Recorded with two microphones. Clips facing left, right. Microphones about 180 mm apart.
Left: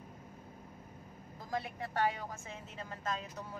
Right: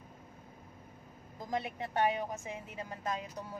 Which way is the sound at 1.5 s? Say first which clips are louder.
Right 3 dB; 20° right (ahead or behind).